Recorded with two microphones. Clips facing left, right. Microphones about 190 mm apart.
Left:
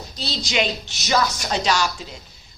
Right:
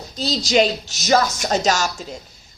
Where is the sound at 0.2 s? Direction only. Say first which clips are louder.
Right 7 dB; 40° right (ahead or behind).